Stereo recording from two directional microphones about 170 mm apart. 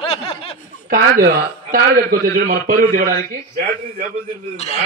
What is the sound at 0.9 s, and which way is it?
A man's voice, 60° right (ahead or behind).